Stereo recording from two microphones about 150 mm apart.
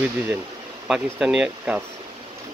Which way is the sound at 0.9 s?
5° right (ahead or behind).